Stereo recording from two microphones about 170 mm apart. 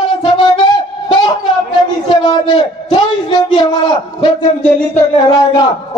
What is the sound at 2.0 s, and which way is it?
A man's voice, 30° left (ahead or behind).